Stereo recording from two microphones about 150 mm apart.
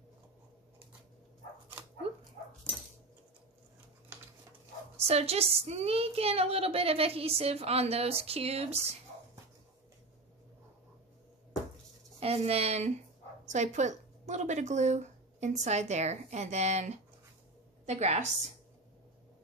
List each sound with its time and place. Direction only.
2.0 s dog: 40° right (ahead or behind)
5.0 s a woman's voice: 45° right (ahead or behind)
12.2 s speech: 40° right (ahead or behind)